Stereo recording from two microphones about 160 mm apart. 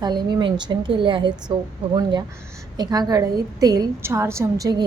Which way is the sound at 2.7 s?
25° right (ahead or behind).